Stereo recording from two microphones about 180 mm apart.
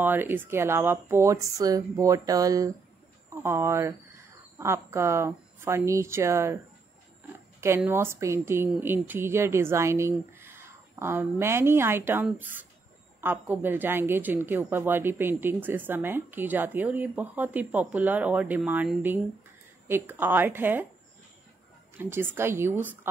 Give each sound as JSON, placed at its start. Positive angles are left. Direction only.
{"t": 0.0, "sound": "a woman's voice", "side_deg": -10}
{"t": 7.6, "sound": "a woman's voice", "side_deg": -15}
{"t": 21.9, "sound": "a woman's voice", "side_deg": -10}